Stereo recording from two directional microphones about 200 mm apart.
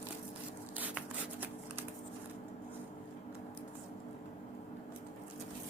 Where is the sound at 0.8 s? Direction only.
10° right (ahead or behind).